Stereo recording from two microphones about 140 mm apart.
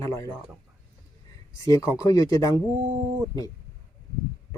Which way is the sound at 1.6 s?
20° left (ahead or behind).